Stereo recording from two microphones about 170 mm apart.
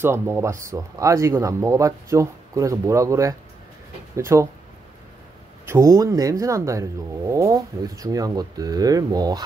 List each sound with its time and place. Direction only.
0.0 s speech: 15° right (ahead or behind)
5.7 s speech: 15° right (ahead or behind)